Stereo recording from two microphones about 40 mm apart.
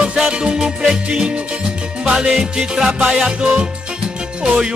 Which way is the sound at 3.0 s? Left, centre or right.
Right.